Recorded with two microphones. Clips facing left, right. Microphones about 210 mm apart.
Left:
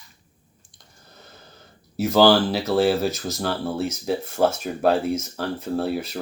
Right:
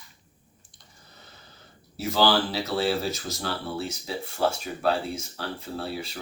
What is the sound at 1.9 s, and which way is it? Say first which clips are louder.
Speech: left 7 dB; 50° left (ahead or behind).